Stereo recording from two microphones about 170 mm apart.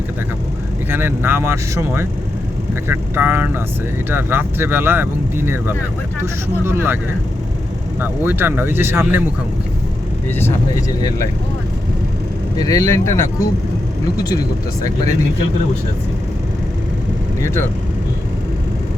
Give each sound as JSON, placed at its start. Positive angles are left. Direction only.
{"t": 0.9, "sound": "speech", "side_deg": -10}
{"t": 8.0, "sound": "speech", "side_deg": -10}
{"t": 10.3, "sound": "speech", "side_deg": 15}
{"t": 12.5, "sound": "speech", "side_deg": 20}
{"t": 17.4, "sound": "speech", "side_deg": 15}